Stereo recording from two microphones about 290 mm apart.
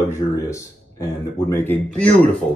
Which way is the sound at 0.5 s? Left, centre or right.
Centre.